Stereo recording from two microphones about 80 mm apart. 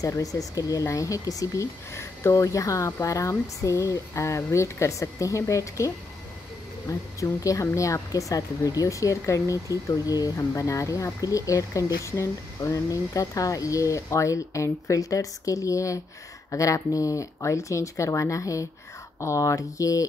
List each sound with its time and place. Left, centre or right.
0.0 s speech: left
6.9 s speech: left